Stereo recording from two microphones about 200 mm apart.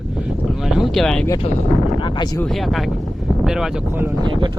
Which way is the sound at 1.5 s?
30° left (ahead or behind).